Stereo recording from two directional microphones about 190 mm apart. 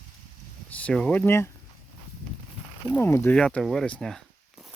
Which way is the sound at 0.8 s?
5° left (ahead or behind).